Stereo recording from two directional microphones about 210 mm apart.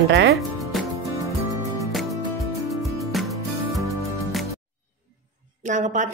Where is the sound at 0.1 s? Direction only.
55° right (ahead or behind).